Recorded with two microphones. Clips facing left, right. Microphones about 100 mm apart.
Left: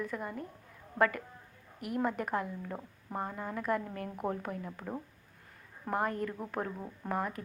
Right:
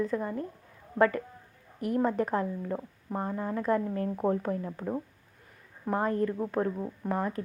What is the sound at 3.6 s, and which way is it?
Speech, 30° right (ahead or behind).